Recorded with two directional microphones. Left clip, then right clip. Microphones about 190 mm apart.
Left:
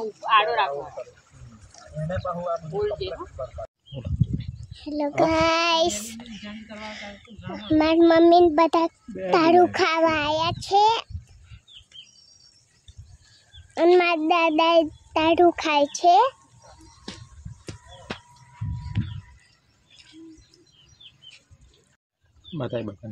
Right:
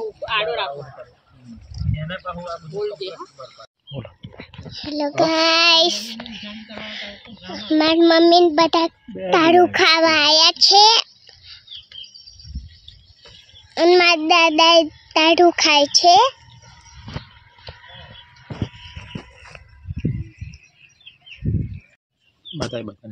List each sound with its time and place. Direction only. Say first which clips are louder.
0.3 s speech: left 3 dB; 15° left (ahead or behind)
2.3 s a man's voice: left 1 dB; 55° right (ahead or behind)
2.8 s speech: right 4 dB; 10° left (ahead or behind)
4.7 s child singing: right 4 dB; centre (ahead or behind)
13.7 s child singing: right 5 dB; 5° right (ahead or behind)
22.6 s speech: right 2 dB; 20° right (ahead or behind)